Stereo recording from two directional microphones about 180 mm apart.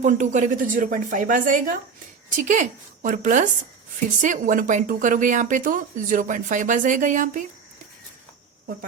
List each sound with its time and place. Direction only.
0.0 s speech: 40° right (ahead or behind)